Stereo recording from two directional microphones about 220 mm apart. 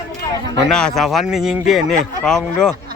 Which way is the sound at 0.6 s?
5° left (ahead or behind).